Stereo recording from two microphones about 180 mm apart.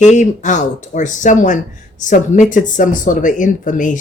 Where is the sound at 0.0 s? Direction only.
40° left (ahead or behind).